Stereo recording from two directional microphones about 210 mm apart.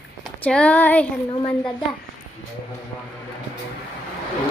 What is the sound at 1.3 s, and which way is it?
Speech, 20° left (ahead or behind).